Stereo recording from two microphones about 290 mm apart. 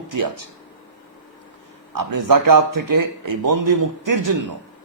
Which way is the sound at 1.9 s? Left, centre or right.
Right.